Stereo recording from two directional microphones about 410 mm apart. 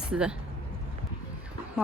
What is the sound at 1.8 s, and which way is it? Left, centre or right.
Speech, centre.